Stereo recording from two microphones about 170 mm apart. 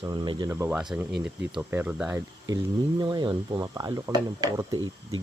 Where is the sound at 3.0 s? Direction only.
25° right (ahead or behind).